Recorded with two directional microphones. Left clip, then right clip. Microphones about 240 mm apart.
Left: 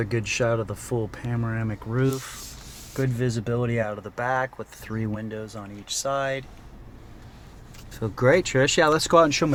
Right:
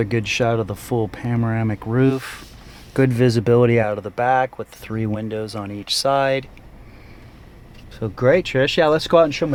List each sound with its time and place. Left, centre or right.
0.0 s speech: centre
2.9 s speech: right
4.0 s speech: centre
5.5 s speech: right
7.9 s speech: centre